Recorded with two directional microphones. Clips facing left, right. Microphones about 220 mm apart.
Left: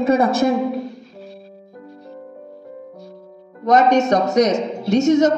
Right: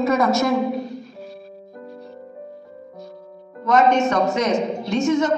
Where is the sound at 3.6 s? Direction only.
40° left (ahead or behind).